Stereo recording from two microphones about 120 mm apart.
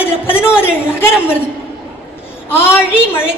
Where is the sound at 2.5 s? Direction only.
20° left (ahead or behind).